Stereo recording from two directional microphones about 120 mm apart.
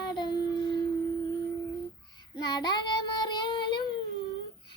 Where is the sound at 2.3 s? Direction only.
35° left (ahead or behind).